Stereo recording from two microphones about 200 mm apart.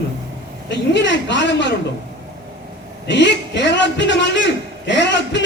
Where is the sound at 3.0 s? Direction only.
60° left (ahead or behind).